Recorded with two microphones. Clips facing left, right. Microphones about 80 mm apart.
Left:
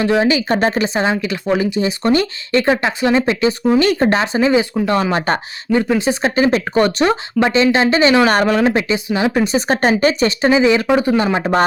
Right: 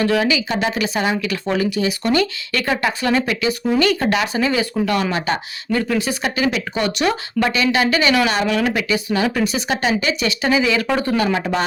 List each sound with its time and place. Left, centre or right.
0.0 s speech: left
0.3 s speech: left
5.1 s speech: left
5.7 s speech: left
8.3 s speech: left